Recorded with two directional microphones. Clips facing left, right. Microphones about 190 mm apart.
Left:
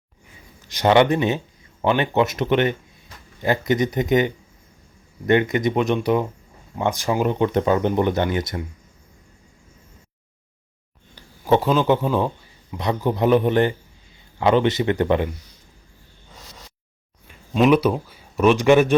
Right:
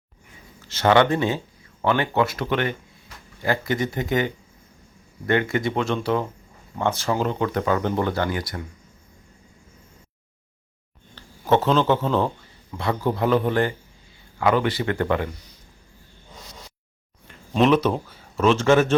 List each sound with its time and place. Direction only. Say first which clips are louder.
0.6 s speech: left 2 dB; 15° left (ahead or behind)
11.1 s speech: left 2 dB; 10° left (ahead or behind)
17.2 s speech: left 2 dB; 10° left (ahead or behind)